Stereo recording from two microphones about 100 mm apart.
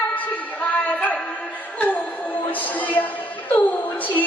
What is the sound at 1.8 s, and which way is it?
Music, 15° left (ahead or behind).